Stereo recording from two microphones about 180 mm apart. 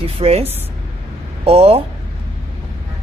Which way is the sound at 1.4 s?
35° right (ahead or behind).